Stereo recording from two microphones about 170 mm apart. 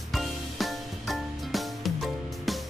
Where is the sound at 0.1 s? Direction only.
Centre (ahead or behind).